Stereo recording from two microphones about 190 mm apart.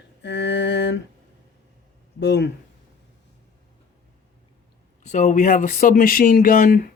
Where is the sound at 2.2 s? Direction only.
65° left (ahead or behind).